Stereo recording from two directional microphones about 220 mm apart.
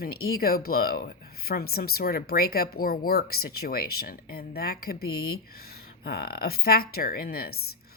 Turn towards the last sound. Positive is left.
turn(degrees=45)  # may be behind; listen again after turning